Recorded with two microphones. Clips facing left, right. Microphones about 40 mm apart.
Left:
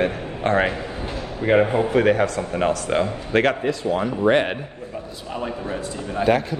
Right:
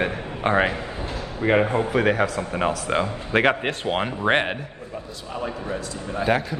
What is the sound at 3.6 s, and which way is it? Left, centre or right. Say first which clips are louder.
Speech: left 2 dB; right.